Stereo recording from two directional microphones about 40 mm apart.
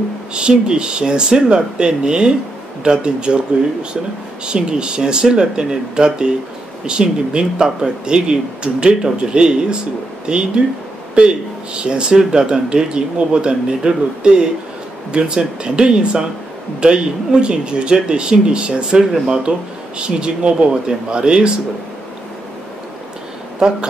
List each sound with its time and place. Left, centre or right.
0.3 s speech: right
4.5 s speech: right